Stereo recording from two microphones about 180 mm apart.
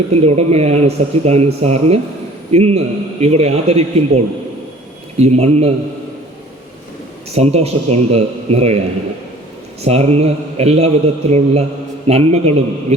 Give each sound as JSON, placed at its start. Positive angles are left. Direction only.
{"t": 0.1, "sound": "speech", "side_deg": -35}
{"t": 5.2, "sound": "speech", "side_deg": -35}
{"t": 7.3, "sound": "speech", "side_deg": -35}
{"t": 9.8, "sound": "speech", "side_deg": -35}